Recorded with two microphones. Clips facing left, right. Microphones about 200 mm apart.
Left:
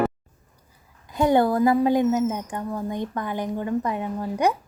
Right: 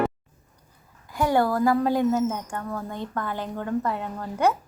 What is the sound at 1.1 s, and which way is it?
A woman's voice, 20° left (ahead or behind).